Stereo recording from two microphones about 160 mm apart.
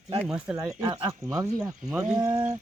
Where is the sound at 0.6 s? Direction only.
20° right (ahead or behind).